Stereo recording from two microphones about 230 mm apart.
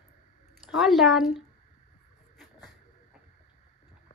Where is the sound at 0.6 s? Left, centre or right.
Centre.